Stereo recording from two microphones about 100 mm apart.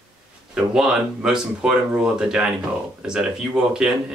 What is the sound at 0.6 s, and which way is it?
Speech, 5° right (ahead or behind).